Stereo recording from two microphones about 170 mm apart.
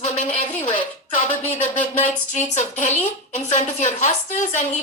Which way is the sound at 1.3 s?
10° left (ahead or behind).